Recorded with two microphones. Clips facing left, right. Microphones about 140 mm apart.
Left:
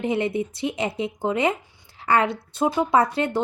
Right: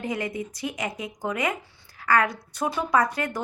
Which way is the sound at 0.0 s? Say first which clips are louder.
Left 6 dB; 25° left (ahead or behind).